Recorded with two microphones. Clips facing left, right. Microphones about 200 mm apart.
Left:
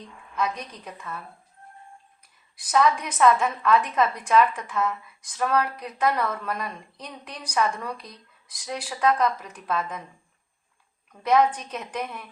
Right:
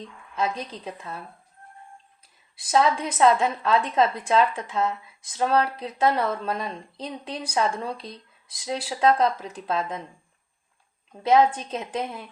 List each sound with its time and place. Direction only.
0.3 s a woman's voice: 30° right (ahead or behind)
2.6 s a woman's voice: 30° right (ahead or behind)
11.1 s a woman's voice: 25° right (ahead or behind)